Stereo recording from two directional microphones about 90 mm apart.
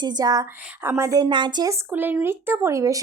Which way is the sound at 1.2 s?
60° right (ahead or behind).